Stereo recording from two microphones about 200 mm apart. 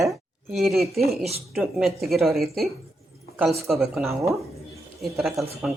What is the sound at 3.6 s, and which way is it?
Speech, centre (ahead or behind).